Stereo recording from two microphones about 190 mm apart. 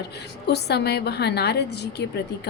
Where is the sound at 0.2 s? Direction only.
60° left (ahead or behind).